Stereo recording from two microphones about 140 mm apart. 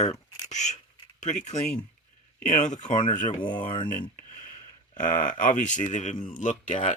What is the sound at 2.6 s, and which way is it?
Speech, 60° left (ahead or behind).